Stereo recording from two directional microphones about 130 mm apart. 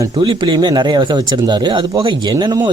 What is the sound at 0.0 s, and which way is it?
Speech, 35° right (ahead or behind).